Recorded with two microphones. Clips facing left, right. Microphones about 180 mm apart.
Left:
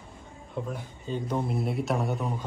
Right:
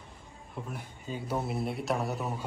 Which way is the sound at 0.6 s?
10° right (ahead or behind).